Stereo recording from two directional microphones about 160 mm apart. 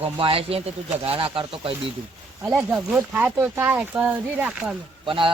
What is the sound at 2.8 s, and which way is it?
Speech, 5° right (ahead or behind).